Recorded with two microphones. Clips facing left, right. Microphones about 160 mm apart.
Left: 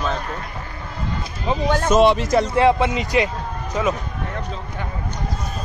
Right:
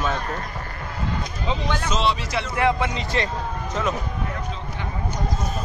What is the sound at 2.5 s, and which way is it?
Speech, 25° left (ahead or behind).